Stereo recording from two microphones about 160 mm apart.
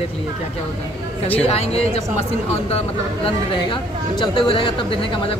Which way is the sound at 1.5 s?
40° left (ahead or behind).